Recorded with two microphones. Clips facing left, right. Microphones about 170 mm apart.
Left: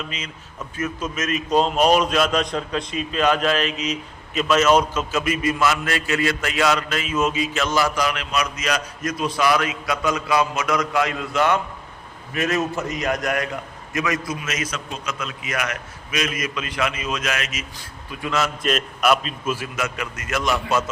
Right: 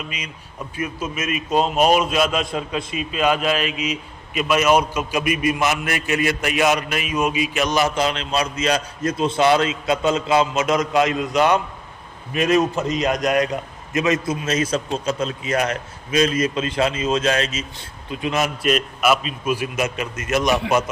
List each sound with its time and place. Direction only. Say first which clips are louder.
0.1 s a man's voice: right 1 dB; 15° right (ahead or behind)
18.6 s a man's voice: right 2 dB; 5° right (ahead or behind)